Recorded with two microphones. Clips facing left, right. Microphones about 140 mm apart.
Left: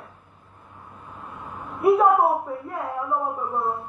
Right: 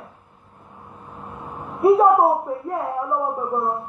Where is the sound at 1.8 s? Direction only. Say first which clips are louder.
Right 3 dB; 30° right (ahead or behind).